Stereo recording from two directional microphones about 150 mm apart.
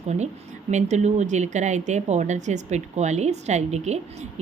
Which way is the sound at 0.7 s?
50° right (ahead or behind).